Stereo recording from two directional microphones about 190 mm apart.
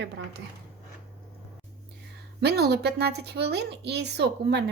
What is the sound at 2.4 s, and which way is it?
A woman's voice, 60° right (ahead or behind).